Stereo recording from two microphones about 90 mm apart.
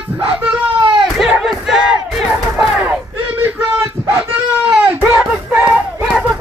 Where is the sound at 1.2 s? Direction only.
5° right (ahead or behind).